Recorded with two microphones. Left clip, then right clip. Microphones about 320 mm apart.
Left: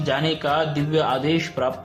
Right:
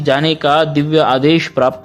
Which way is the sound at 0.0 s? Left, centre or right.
Right.